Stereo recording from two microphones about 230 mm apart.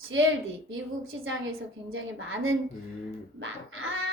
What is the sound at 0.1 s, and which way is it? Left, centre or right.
A woman's voice, right.